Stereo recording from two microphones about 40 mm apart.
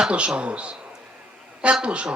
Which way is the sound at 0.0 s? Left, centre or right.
Right.